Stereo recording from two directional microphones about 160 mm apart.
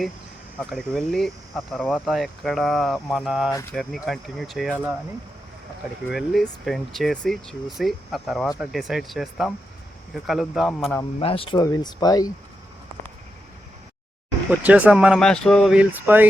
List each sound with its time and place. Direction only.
0.6 s speech: centre (ahead or behind)
3.5 s speech: 15° left (ahead or behind)
3.8 s speech: centre (ahead or behind)
6.1 s speech: centre (ahead or behind)
11.2 s speech: 35° left (ahead or behind)
14.5 s speech: 10° right (ahead or behind)
15.2 s speech: 5° left (ahead or behind); by 16.2 s 10° right (ahead or behind)